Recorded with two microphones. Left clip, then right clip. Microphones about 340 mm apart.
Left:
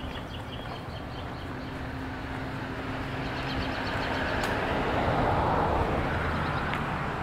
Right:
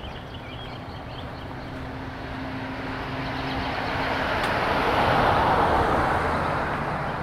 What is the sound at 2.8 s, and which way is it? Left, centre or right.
Vehicle, centre.